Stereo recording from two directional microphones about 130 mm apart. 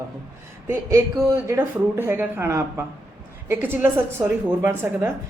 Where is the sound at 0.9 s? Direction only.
25° right (ahead or behind).